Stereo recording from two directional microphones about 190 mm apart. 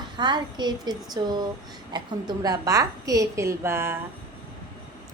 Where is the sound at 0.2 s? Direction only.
25° right (ahead or behind).